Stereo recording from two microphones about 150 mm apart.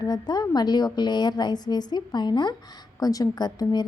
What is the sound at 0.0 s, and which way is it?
A woman's voice, 25° left (ahead or behind).